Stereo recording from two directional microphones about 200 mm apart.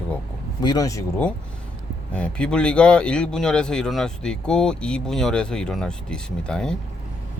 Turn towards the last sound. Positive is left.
turn(degrees=5)  # may be behind; listen again after turning